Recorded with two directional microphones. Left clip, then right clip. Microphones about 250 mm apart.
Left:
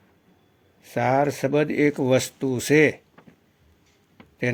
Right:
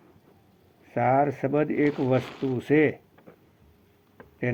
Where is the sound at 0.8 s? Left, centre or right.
Left.